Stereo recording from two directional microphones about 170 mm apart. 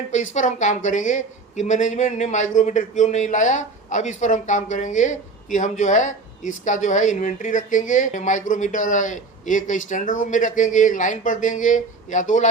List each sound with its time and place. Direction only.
0.3 s a woman's voice: 45° left (ahead or behind)